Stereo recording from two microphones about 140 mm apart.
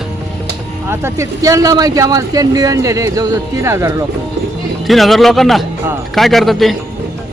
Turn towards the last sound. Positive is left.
turn(degrees=0)  # may be behind; listen again after turning